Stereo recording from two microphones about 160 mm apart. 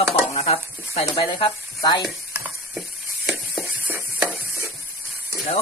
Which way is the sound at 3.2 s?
5° right (ahead or behind).